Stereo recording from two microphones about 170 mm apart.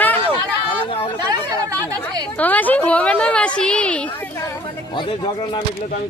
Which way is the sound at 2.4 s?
10° left (ahead or behind).